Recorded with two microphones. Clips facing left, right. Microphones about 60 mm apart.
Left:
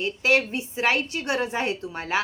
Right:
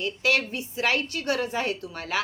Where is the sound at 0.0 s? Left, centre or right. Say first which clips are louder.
Left 3 dB; left.